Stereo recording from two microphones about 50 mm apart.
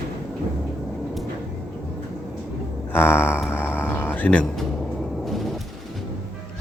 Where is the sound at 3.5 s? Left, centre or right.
Left.